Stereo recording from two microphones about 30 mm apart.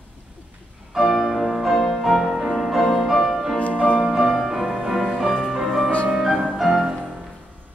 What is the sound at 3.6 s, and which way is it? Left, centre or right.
Music, left.